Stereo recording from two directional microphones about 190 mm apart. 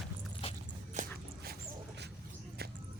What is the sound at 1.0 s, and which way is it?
Dog, 40° right (ahead or behind).